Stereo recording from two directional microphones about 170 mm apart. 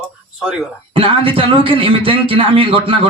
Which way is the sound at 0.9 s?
30° right (ahead or behind).